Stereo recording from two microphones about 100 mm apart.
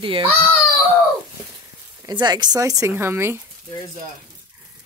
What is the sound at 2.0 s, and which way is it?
Speech, 45° right (ahead or behind).